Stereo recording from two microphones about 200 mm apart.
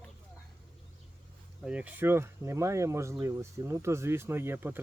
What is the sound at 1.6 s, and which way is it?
Speech, 5° right (ahead or behind).